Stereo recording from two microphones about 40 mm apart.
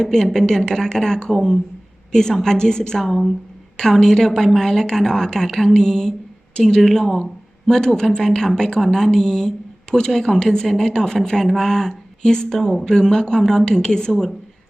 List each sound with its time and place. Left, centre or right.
0.0 s a woman's voice: centre
3.1 s speech: centre
3.8 s a woman's voice: centre
14.1 s speech: centre